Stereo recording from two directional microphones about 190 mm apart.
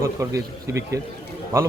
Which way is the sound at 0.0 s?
15° right (ahead or behind).